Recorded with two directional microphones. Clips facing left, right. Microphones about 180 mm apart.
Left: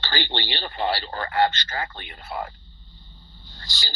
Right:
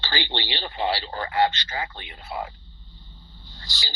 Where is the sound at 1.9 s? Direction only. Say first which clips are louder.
Left 1 dB; 50° left (ahead or behind).